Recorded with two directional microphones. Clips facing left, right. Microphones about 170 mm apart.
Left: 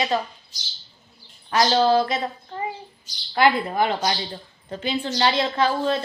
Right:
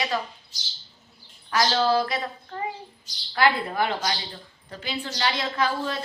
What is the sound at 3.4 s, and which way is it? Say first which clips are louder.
A woman's voice: left 3 dB; 20° left (ahead or behind).